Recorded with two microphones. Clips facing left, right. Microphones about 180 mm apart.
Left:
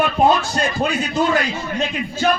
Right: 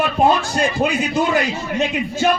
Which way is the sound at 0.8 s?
15° right (ahead or behind).